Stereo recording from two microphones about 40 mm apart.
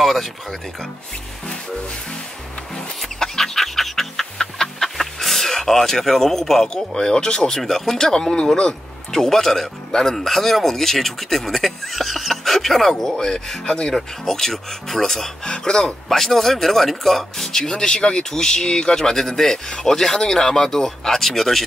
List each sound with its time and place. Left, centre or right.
0.0 s speech: centre
2.7 s chicken: centre
6.7 s speech: centre
7.5 s speech: centre
13.1 s speech: centre
13.9 s speech: centre
15.4 s speech: centre